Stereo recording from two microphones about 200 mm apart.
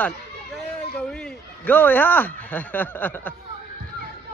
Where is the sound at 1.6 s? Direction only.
10° left (ahead or behind).